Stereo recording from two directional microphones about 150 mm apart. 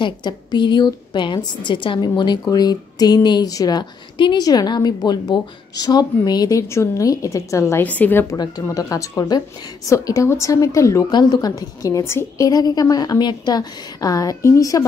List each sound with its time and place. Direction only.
0.0 s a woman's voice: 30° left (ahead or behind)